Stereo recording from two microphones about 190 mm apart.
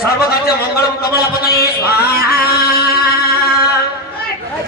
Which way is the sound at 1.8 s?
55° left (ahead or behind).